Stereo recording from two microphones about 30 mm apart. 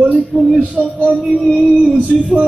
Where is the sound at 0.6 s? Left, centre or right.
Right.